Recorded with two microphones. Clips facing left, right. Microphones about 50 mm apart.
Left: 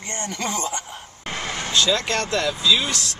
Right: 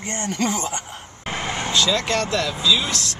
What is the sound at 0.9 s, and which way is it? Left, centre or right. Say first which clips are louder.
Vehicle: right 2 dB; centre.